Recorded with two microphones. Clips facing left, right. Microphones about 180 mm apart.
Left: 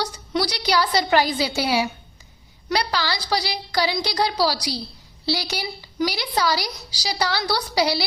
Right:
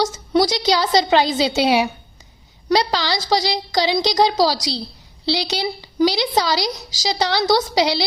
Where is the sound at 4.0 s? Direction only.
90° right.